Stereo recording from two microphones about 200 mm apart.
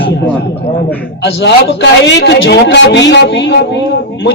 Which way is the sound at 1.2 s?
60° left (ahead or behind).